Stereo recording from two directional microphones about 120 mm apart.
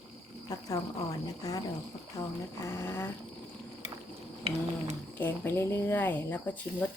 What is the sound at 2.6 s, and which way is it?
Speech, 20° left (ahead or behind).